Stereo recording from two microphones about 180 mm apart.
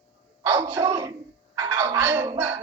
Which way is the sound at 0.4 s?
15° right (ahead or behind).